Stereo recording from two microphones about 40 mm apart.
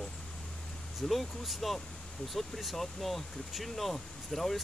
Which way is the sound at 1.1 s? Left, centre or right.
Centre.